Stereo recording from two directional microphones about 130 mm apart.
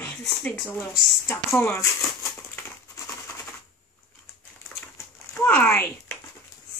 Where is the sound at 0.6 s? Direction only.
15° left (ahead or behind).